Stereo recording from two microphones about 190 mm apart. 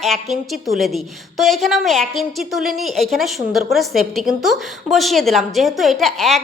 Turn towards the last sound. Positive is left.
turn(degrees=0)  # may be behind; listen again after turning